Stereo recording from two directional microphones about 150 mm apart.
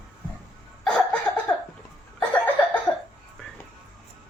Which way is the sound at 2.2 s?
10° left (ahead or behind).